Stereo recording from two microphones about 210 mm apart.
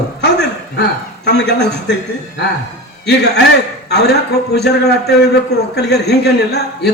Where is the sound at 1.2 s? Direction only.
55° left (ahead or behind).